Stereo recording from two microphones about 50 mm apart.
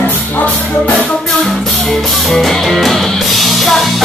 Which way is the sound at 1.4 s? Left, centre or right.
Centre.